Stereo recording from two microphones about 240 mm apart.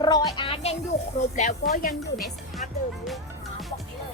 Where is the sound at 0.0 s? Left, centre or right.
Centre.